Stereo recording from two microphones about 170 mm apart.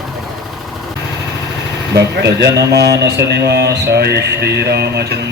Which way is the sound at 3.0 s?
85° right.